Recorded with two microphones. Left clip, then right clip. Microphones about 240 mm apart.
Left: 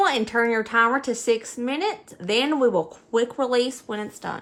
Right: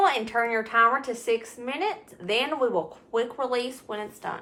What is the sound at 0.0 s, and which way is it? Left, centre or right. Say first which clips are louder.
A woman's voice: left 2 dB; left.